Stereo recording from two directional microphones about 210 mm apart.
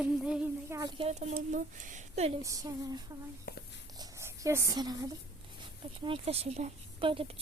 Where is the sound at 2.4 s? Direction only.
15° right (ahead or behind).